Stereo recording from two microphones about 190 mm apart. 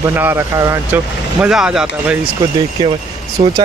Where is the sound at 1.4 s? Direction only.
5° right (ahead or behind).